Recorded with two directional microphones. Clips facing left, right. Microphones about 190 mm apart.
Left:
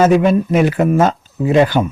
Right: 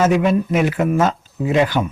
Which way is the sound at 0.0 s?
35° left (ahead or behind).